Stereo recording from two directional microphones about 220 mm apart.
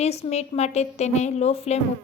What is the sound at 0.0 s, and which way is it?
A woman's voice, 30° left (ahead or behind).